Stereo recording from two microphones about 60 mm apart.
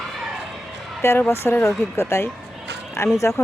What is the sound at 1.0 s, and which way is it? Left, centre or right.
Speech, left.